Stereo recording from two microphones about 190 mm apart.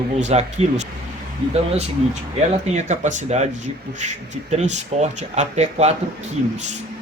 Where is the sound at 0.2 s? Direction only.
35° right (ahead or behind).